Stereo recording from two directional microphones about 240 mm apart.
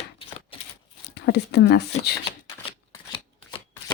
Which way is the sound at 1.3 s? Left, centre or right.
Left.